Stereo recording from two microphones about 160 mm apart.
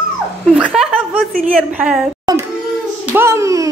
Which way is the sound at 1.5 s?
5° right (ahead or behind).